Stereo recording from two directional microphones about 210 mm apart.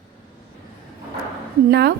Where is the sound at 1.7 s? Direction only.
50° right (ahead or behind).